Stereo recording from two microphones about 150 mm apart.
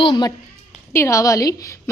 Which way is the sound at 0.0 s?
30° left (ahead or behind).